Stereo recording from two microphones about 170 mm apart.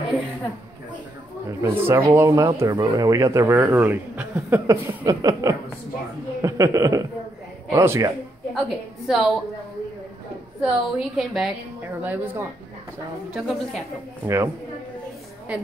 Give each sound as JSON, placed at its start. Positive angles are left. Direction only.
{"t": 1.6, "sound": "a man's voice", "side_deg": -15}
{"t": 8.5, "sound": "a woman's voice", "side_deg": 0}
{"t": 10.6, "sound": "a woman's voice", "side_deg": 0}
{"t": 14.2, "sound": "a man's voice", "side_deg": -15}
{"t": 15.5, "sound": "a man's voice", "side_deg": -5}